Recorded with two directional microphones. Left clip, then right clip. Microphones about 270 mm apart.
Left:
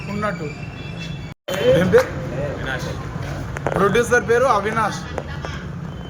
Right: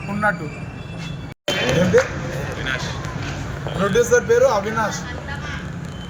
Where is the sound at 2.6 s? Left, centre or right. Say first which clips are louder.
Right 2 dB; left.